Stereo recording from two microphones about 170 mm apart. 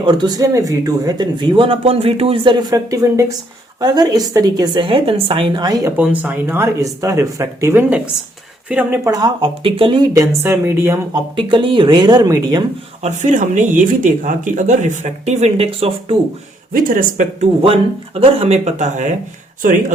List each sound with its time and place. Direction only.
0.0 s speech: 25° right (ahead or behind)
6.0 s speech: 10° right (ahead or behind)
9.0 s speech: 25° right (ahead or behind)
10.4 s speech: 15° right (ahead or behind)
11.1 s speech: 30° right (ahead or behind)
13.0 s speech: 45° right (ahead or behind)
16.7 s speech: 55° right (ahead or behind)
17.6 s speech: 35° right (ahead or behind)